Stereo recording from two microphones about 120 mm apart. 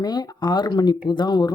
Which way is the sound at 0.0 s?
35° left (ahead or behind).